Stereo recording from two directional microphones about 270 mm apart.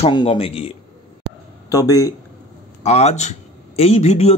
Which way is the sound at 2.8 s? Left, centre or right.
Left.